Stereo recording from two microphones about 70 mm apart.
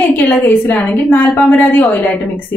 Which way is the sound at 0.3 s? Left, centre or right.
Left.